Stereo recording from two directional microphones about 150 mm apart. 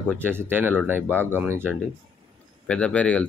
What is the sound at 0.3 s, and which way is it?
Speech, 15° right (ahead or behind).